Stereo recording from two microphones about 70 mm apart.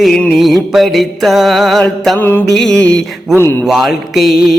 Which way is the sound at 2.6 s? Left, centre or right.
Centre.